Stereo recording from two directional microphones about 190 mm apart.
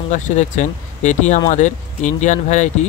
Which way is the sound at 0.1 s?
40° left (ahead or behind).